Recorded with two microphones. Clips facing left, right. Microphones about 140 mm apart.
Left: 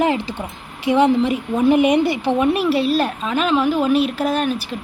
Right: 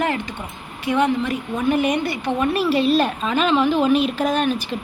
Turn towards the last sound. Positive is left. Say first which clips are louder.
# even
turn(degrees=10)  # may be behind; listen again after turning